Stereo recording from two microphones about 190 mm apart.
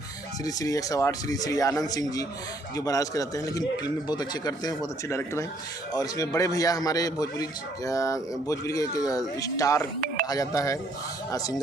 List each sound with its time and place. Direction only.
0.4 s a man's voice: 20° left (ahead or behind)